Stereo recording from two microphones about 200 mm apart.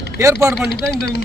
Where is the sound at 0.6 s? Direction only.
55° left (ahead or behind).